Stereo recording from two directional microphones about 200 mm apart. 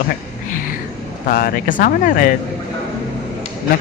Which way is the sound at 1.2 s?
45° left (ahead or behind).